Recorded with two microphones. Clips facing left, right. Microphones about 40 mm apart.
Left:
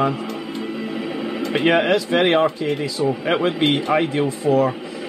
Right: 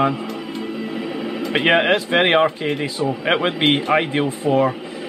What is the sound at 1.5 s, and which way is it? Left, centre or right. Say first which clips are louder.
Speech: right 1 dB; right.